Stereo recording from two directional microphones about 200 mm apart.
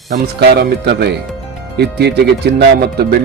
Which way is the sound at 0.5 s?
55° right (ahead or behind).